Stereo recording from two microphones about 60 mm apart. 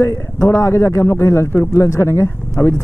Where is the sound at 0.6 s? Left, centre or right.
Left.